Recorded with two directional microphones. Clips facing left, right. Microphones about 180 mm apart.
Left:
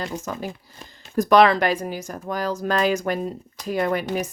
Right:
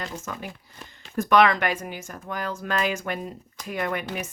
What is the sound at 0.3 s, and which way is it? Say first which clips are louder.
Speech: left 5 dB; 35° left (ahead or behind).